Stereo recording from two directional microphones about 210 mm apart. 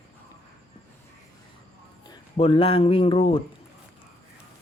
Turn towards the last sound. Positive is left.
turn(degrees=25)  # may be behind; listen again after turning